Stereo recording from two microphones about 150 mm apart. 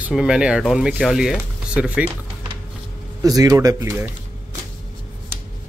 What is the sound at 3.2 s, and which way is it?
Speech, 25° right (ahead or behind).